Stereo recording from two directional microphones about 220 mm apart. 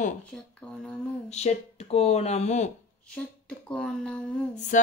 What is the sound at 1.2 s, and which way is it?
Speech, 30° left (ahead or behind).